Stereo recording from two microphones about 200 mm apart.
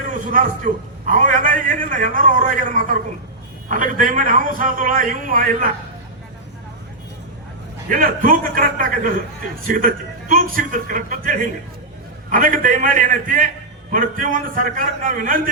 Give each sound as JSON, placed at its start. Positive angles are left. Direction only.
{"t": 0.1, "sound": "a man's voice", "side_deg": -40}
{"t": 7.9, "sound": "a man's voice", "side_deg": -45}